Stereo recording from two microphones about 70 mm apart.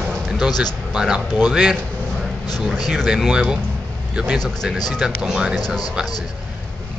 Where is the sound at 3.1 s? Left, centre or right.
Centre.